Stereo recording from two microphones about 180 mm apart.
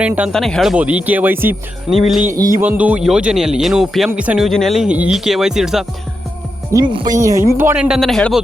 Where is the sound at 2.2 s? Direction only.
50° right (ahead or behind).